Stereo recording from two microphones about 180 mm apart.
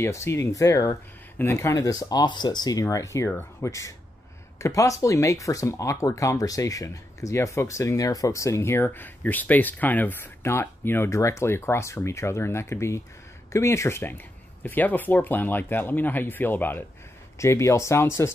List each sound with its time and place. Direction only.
0.0 s speech: 15° left (ahead or behind)